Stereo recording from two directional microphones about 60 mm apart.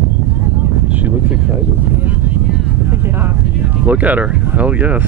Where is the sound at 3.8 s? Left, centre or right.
Right.